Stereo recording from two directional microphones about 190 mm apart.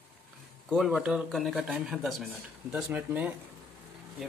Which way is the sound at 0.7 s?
Centre (ahead or behind).